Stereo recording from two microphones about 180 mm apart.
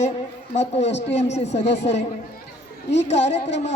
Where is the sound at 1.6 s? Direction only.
75° left (ahead or behind).